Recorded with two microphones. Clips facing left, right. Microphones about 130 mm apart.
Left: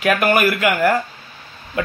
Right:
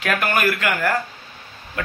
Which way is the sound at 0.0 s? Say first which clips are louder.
Left 5 dB; 10° left (ahead or behind).